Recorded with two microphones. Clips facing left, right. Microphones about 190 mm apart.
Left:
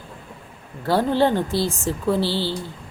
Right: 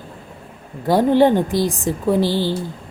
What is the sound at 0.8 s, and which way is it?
Speech, 15° right (ahead or behind).